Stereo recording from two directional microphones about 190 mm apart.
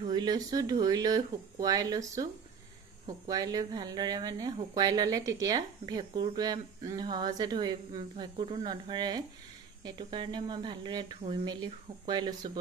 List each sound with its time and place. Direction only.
0.1 s speech: 20° right (ahead or behind)
3.3 s speech: 20° right (ahead or behind)